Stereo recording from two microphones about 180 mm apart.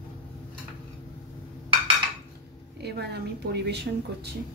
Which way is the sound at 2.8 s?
65° right (ahead or behind).